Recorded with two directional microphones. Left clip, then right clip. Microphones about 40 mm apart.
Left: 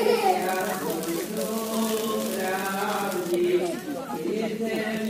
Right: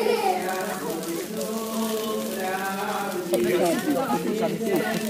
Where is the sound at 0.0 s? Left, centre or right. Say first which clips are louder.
Left 1 dB; centre.